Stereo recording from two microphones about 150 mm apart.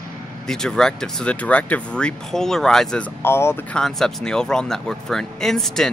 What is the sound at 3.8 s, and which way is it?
Speech, 5° left (ahead or behind).